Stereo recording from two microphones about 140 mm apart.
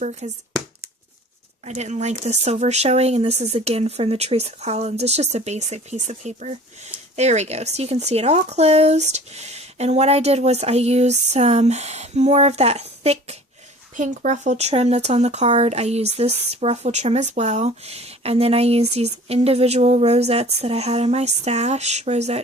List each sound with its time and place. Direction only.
0.0 s speech: 55° right (ahead or behind)
1.6 s speech: 55° right (ahead or behind)
13.9 s speech: 70° right (ahead or behind); by 22.4 s 50° right (ahead or behind)